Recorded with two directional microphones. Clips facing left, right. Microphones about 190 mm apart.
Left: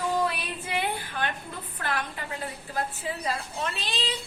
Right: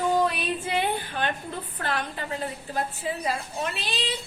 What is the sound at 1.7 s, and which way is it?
A woman's voice, 30° right (ahead or behind).